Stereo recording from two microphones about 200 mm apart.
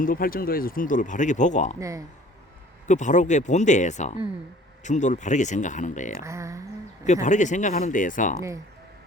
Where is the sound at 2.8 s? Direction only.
35° left (ahead or behind).